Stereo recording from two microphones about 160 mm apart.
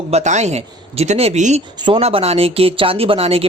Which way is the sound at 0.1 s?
45° right (ahead or behind).